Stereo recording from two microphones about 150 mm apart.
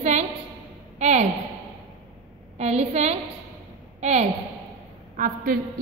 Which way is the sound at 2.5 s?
45° right (ahead or behind).